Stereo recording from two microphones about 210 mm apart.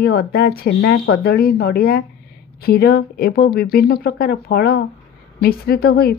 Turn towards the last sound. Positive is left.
turn(degrees=50)  # may be behind; listen again after turning